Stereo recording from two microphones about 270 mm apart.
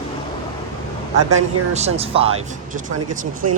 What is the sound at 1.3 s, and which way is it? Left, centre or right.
Speech, right.